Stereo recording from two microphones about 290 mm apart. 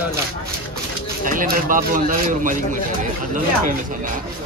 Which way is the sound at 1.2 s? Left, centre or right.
Right.